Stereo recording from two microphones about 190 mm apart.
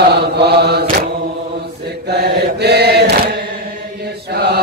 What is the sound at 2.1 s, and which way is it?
Mantra, 60° right (ahead or behind).